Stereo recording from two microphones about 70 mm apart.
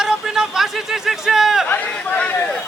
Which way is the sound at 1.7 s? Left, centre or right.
Left.